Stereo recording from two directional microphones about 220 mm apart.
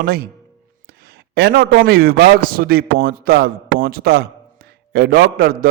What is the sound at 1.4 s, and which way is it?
A man's voice, 45° right (ahead or behind).